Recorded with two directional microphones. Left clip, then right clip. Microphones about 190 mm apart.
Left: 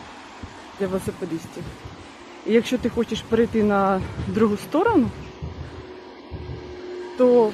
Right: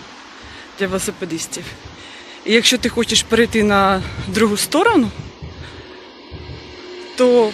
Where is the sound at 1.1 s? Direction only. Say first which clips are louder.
Right 4 dB; 15° right (ahead or behind).